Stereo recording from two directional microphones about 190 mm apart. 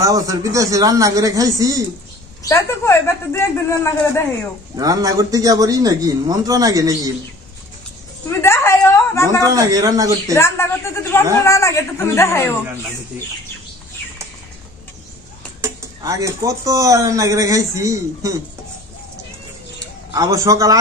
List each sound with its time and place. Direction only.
0.0 s speech: 15° right (ahead or behind)
2.4 s speech: 15° left (ahead or behind)
4.7 s speech: 20° right (ahead or behind)
8.3 s a sound: 15° left (ahead or behind)
9.4 s speech: 20° right (ahead or behind)
10.3 s speech: 15° left (ahead or behind)
15.6 s speech: 15° right (ahead or behind)
20.1 s speech: 15° right (ahead or behind)